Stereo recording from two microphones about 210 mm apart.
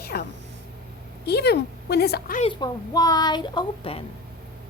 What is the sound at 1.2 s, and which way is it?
A woman's voice, 50° left (ahead or behind).